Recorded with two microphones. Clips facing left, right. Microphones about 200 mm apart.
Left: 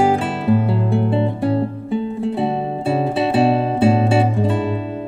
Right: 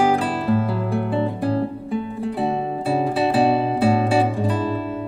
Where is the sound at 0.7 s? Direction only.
25° left (ahead or behind).